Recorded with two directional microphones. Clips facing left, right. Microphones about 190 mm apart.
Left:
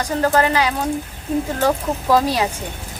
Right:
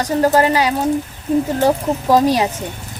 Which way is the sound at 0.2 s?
15° right (ahead or behind).